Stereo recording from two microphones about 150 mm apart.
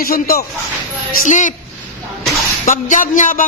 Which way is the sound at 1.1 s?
60° left (ahead or behind).